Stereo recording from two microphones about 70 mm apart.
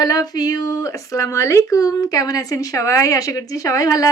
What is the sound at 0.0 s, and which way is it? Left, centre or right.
Speech, left.